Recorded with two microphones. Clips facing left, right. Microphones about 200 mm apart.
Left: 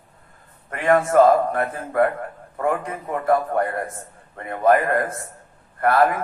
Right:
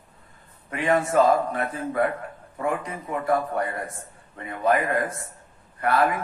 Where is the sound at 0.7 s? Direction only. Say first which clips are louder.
Left 4 dB; 55° left (ahead or behind).